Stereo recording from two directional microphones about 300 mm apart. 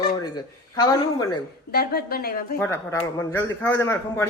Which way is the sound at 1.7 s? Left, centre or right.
Left.